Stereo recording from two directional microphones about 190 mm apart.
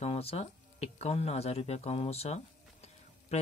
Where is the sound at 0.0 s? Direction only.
30° left (ahead or behind).